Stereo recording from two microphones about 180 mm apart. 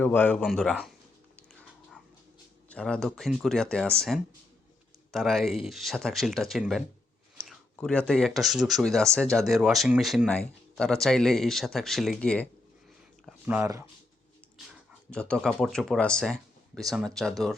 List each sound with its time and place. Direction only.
0.0 s speech: 10° left (ahead or behind)
1.4 s dog: centre (ahead or behind)
2.6 s speech: 5° left (ahead or behind)
13.6 s speech: 15° right (ahead or behind)
15.1 s speech: 5° left (ahead or behind)